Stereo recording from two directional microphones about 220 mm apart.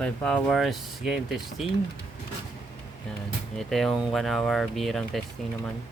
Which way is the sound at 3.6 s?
Centre (ahead or behind).